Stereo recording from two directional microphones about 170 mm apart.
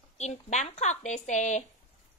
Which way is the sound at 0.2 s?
45° left (ahead or behind).